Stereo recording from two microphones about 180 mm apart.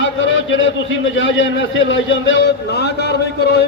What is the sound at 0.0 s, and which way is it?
A man's voice, 90° left.